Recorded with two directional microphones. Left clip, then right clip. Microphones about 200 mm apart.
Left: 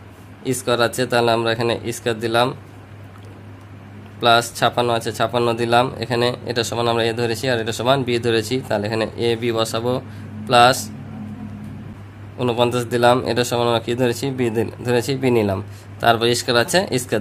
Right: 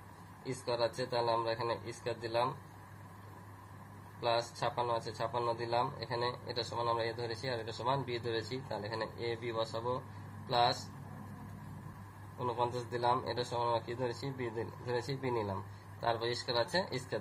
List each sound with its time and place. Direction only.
0.4 s speech: 55° left (ahead or behind)
4.2 s speech: 55° left (ahead or behind)
12.4 s speech: 55° left (ahead or behind)